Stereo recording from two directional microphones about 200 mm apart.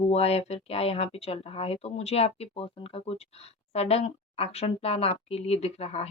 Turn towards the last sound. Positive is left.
turn(degrees=30)  # may be behind; listen again after turning